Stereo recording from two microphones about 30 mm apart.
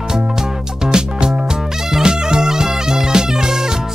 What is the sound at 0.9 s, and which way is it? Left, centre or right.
Music, right.